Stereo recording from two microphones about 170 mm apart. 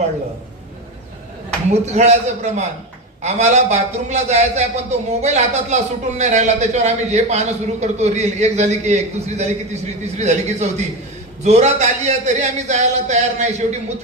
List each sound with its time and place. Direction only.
1.5 s a man's voice: 40° right (ahead or behind)